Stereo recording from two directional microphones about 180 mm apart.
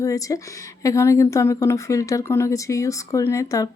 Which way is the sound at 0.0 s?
20° left (ahead or behind).